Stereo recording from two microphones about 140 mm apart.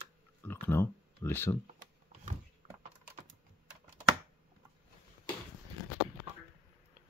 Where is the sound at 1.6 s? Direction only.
55° right (ahead or behind).